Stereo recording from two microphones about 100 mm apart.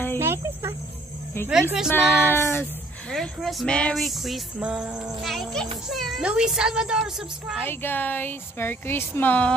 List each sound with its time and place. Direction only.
0.2 s cricket: 25° right (ahead or behind)
1.5 s a woman's voice: 5° right (ahead or behind)
1.9 s speech: 25° left (ahead or behind)
3.1 s a woman's voice: centre (ahead or behind)
7.6 s speech: 20° left (ahead or behind)